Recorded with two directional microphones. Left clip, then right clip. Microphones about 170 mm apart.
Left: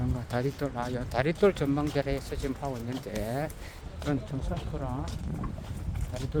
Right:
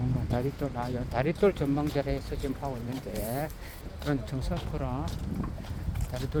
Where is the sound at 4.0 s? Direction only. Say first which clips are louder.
Even; 5° right (ahead or behind).